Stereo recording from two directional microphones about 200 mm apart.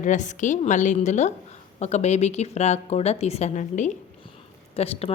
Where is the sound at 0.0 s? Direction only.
40° left (ahead or behind).